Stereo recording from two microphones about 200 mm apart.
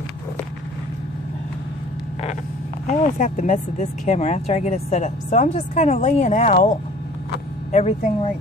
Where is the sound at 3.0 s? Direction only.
40° left (ahead or behind).